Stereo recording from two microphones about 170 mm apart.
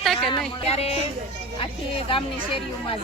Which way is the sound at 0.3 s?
35° left (ahead or behind).